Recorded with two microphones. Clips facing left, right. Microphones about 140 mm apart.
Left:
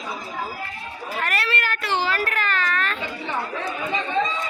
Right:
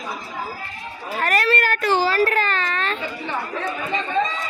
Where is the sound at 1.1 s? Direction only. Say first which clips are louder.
Right 6 dB; 40° right (ahead or behind).